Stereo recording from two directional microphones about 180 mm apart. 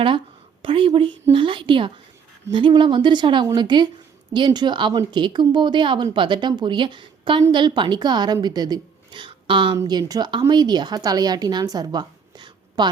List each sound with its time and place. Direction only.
0.6 s a woman's voice: 30° right (ahead or behind)